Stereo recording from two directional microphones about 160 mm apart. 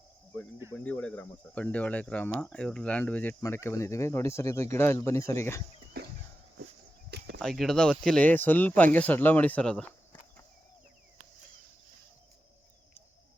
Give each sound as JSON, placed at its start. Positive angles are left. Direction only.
{"t": 0.7, "sound": "speech", "side_deg": 10}
{"t": 6.0, "sound": "a sound", "side_deg": -80}
{"t": 7.3, "sound": "speech", "side_deg": 0}